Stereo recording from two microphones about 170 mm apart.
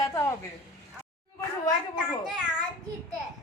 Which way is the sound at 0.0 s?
20° left (ahead or behind).